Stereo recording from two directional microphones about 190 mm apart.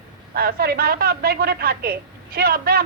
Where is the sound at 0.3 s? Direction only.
55° right (ahead or behind).